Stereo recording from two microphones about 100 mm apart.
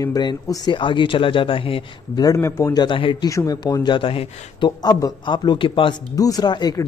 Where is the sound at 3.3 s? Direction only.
35° left (ahead or behind); by 4.7 s 60° left (ahead or behind).